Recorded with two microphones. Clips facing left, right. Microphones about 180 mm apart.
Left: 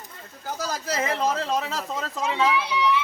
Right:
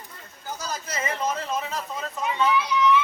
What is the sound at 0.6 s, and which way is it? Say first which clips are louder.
Speech: left 5 dB; 85° left.